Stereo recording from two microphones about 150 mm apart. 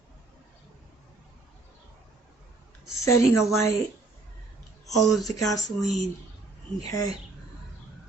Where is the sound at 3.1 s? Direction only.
20° left (ahead or behind).